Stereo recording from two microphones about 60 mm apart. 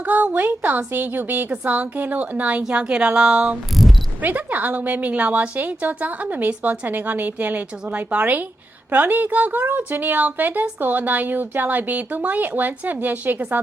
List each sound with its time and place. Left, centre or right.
0.0 s a woman's voice: right
4.2 s a woman's voice: right